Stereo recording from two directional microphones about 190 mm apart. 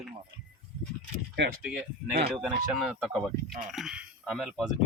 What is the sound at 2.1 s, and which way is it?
Speech, 55° right (ahead or behind).